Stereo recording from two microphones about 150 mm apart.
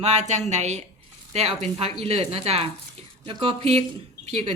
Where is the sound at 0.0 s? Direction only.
50° right (ahead or behind).